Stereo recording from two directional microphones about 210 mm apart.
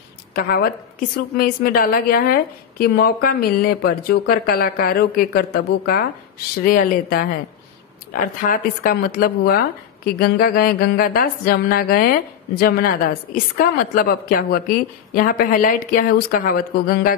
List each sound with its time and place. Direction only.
0.3 s speech: 45° left (ahead or behind)
6.6 s speech: 40° left (ahead or behind)